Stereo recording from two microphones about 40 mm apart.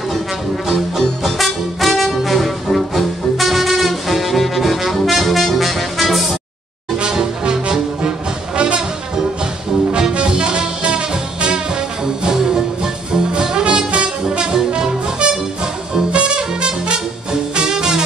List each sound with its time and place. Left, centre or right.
0.7 s music: centre
7.1 s music: centre
9.9 s music: right